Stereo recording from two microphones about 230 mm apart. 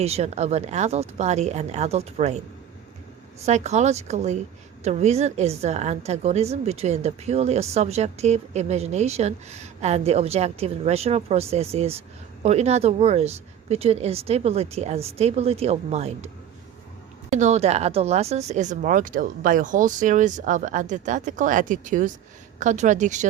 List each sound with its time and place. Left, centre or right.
0.0 s a woman's voice: right
3.4 s a woman's voice: right
17.3 s speech: right